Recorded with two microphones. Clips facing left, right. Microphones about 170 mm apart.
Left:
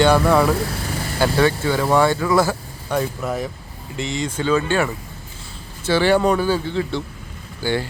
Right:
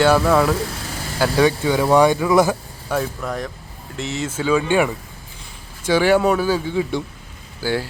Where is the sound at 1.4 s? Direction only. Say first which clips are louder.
Right 4 dB; 15° right (ahead or behind).